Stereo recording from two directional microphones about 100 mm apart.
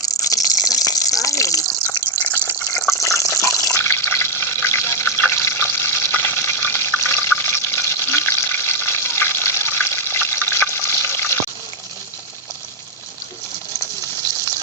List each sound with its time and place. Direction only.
0.0 s water: 35° left (ahead or behind)